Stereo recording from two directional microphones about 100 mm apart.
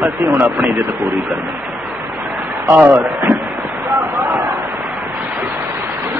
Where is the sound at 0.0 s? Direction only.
20° right (ahead or behind).